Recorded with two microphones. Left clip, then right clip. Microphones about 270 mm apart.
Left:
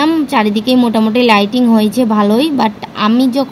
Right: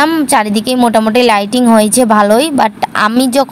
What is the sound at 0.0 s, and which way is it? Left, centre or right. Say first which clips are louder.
A woman's voice: right 2 dB; right.